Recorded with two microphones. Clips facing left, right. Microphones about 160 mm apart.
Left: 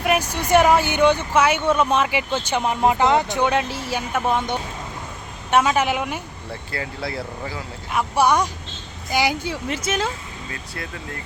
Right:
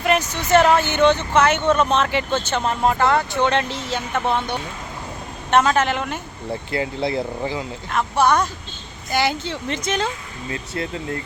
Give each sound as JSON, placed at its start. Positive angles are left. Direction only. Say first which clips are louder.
{"t": 0.0, "sound": "speech", "louder": "right 1 dB", "side_deg": 10}
{"t": 6.7, "sound": "speech", "louder": "right 6 dB", "side_deg": -20}
{"t": 7.9, "sound": "speech", "louder": "even", "side_deg": 10}
{"t": 10.5, "sound": "speech", "louder": "right 8 dB", "side_deg": -25}